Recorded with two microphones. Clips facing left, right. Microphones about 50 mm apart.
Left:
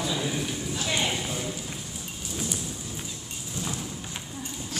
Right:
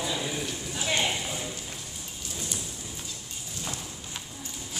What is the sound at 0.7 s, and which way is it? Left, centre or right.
Speech, centre.